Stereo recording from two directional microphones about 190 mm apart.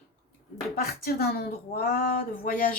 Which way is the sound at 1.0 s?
50° left (ahead or behind).